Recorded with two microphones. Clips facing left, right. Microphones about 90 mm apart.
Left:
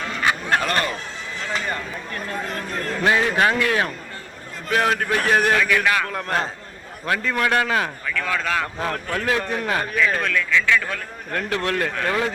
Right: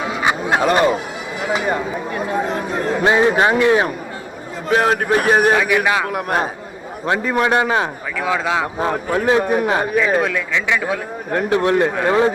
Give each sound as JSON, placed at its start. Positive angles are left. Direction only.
{"t": 0.0, "sound": "a man's voice", "side_deg": -10}